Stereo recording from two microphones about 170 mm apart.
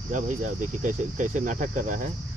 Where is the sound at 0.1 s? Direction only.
50° right (ahead or behind).